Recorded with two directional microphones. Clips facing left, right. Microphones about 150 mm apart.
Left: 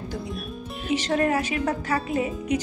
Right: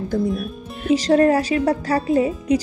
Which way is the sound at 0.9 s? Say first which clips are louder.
Right 8 dB; 35° right (ahead or behind).